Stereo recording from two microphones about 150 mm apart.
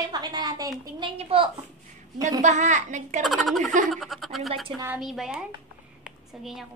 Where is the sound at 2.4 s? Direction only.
55° right (ahead or behind).